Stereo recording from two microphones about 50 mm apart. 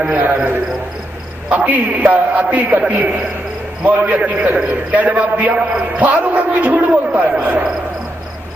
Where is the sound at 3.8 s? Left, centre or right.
Right.